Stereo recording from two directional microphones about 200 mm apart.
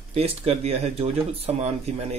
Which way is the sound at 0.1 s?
30° right (ahead or behind).